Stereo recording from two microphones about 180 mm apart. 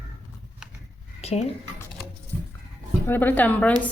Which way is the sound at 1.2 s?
35° left (ahead or behind).